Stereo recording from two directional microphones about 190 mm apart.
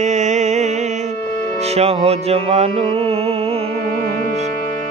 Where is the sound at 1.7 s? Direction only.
30° right (ahead or behind).